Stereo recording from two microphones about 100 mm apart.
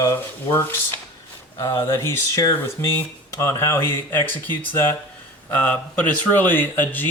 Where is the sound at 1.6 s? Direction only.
25° left (ahead or behind).